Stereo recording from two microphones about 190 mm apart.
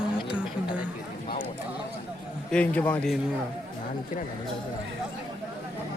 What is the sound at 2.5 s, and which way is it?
Speech, 5° left (ahead or behind).